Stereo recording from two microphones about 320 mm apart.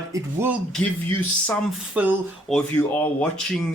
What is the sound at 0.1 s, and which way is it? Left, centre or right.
Speech, centre.